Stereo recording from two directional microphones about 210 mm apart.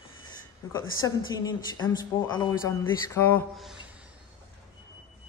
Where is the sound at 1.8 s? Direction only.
20° left (ahead or behind).